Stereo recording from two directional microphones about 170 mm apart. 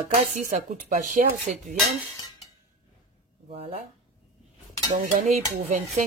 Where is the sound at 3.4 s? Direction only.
35° right (ahead or behind).